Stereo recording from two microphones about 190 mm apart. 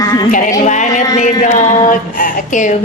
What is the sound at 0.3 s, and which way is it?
Speech, 45° left (ahead or behind).